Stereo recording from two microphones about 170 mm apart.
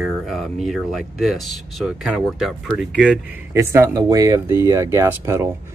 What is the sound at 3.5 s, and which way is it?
Speech, 15° right (ahead or behind).